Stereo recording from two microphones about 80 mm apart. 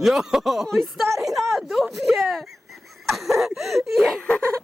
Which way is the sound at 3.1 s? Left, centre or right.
Centre.